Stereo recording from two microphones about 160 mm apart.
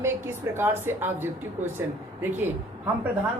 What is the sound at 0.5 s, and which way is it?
Speech, 15° right (ahead or behind).